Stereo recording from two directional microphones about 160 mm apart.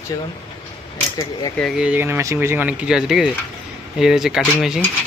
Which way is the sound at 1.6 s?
5° right (ahead or behind).